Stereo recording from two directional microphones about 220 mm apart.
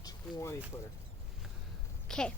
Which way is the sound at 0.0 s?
15° left (ahead or behind).